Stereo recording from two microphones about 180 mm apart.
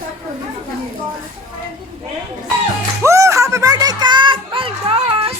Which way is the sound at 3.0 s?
15° right (ahead or behind).